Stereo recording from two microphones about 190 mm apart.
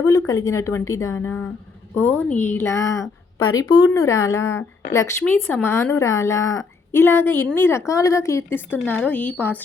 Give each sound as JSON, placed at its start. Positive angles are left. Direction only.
{"t": 0.0, "sound": "a woman's voice", "side_deg": 15}